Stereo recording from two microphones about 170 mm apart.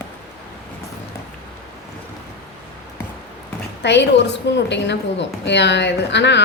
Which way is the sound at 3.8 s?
90° left.